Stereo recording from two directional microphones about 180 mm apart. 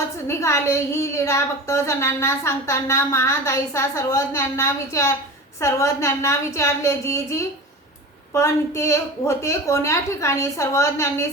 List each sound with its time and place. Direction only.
0.3 s a woman's voice: 15° left (ahead or behind)